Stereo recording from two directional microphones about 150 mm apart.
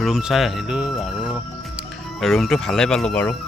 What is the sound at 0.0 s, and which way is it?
Speech, 5° right (ahead or behind).